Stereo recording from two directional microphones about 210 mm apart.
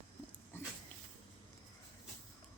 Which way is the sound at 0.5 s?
10° left (ahead or behind).